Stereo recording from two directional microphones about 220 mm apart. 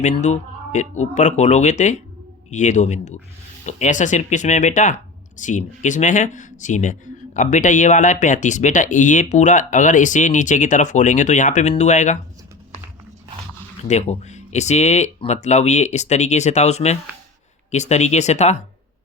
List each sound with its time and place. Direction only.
0.0 s speech: 30° left (ahead or behind)
13.8 s speech: 30° left (ahead or behind)